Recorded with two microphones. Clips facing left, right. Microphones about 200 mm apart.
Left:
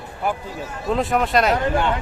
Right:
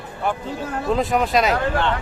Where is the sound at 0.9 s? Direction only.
Centre (ahead or behind).